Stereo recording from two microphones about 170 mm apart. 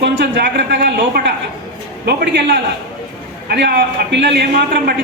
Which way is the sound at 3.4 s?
80° right.